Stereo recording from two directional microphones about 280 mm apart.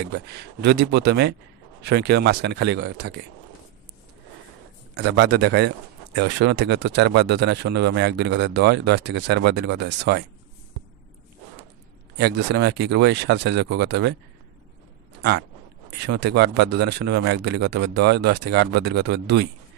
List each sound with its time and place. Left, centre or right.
0.0 s speech: right
4.9 s speech: right
12.2 s speech: right
16.1 s speech: right